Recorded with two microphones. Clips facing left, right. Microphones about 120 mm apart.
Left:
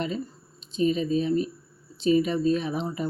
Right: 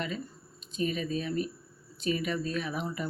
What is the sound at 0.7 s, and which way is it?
Speech, 30° left (ahead or behind).